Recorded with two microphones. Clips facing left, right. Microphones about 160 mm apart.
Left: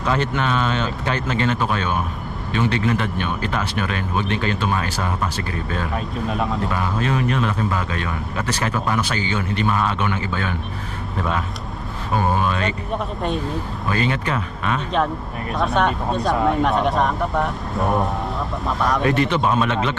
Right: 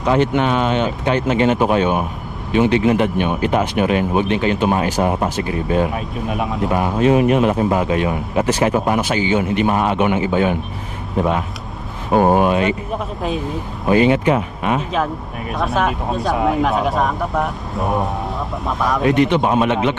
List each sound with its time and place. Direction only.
0.0 s speech: 15° right (ahead or behind)
5.9 s speech: 5° right (ahead or behind)
6.7 s speech: 25° right (ahead or behind)
12.1 s speech: 65° right (ahead or behind)
12.9 s speech: centre (ahead or behind)
13.9 s speech: 15° right (ahead or behind)
14.9 s speech: centre (ahead or behind)
19.0 s speech: 15° right (ahead or behind)